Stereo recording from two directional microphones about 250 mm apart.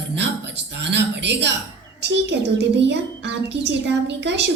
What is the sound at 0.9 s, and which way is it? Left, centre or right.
Speech, right.